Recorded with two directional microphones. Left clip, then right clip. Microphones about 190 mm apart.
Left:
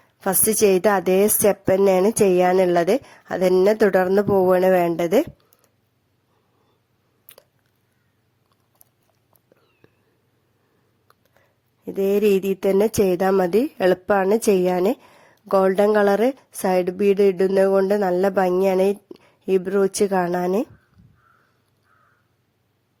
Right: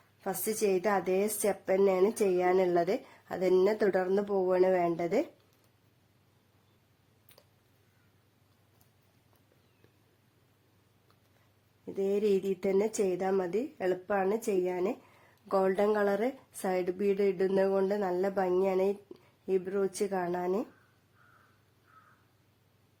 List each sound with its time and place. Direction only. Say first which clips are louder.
0.2 s speech: left 13 dB; 45° left (ahead or behind)
11.9 s speech: left 11 dB; 40° left (ahead or behind)